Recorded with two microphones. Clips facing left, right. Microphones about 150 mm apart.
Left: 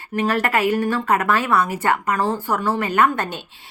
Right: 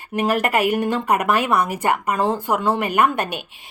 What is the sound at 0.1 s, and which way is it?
A woman's voice, 15° right (ahead or behind).